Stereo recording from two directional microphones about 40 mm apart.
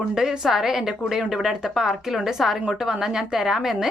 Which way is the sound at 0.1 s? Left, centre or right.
Centre.